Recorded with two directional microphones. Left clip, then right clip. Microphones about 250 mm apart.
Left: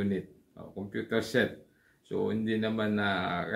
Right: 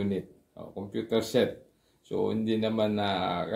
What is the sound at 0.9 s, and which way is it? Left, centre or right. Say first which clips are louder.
Speech: right 2 dB; centre.